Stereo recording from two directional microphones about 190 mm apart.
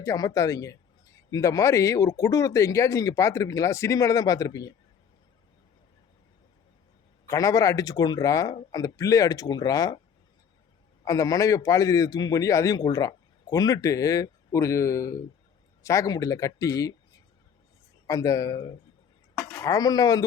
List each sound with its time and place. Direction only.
0.0 s a man's voice: 15° left (ahead or behind)
7.3 s speech: 15° left (ahead or behind)
11.0 s a man's voice: 15° left (ahead or behind)
18.0 s a man's voice: 20° left (ahead or behind)